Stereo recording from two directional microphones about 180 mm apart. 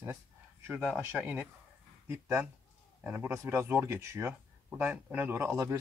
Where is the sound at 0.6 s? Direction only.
10° right (ahead or behind).